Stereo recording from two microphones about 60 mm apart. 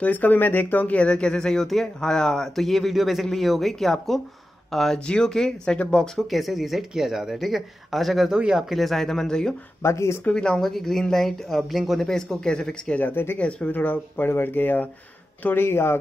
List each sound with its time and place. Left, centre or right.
0.0 s speech: left; by 4.2 s centre
4.9 s speech: centre
6.3 s speech: centre
8.4 s speech: centre
8.6 s speech: centre
9.8 s speech: left
10.3 s speech: centre
12.1 s speech: centre
12.9 s speech: left
13.4 s speech: centre
13.7 s speech: left